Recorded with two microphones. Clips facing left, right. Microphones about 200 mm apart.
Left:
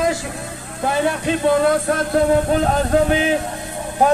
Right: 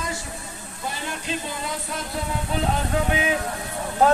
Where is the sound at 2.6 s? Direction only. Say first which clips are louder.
Left 8 dB; 35° left (ahead or behind).